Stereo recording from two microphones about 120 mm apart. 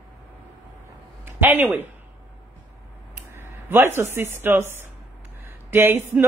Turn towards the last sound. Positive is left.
turn(degrees=-20)  # may be behind; listen again after turning